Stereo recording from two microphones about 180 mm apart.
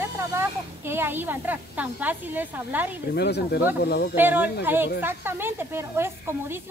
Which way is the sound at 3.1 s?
70° left (ahead or behind).